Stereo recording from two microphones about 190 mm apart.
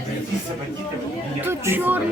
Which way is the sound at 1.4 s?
10° right (ahead or behind).